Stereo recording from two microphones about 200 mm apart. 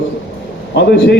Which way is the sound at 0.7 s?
60° left (ahead or behind).